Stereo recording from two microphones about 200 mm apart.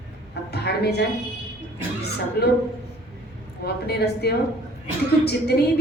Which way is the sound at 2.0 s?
55° left (ahead or behind).